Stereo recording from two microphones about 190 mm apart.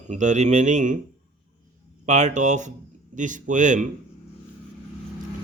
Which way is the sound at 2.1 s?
40° right (ahead or behind).